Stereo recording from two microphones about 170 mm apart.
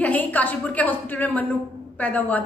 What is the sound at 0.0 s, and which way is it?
A woman's voice, 10° left (ahead or behind).